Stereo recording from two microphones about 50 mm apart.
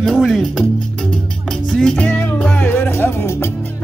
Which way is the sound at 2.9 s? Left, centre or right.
Left.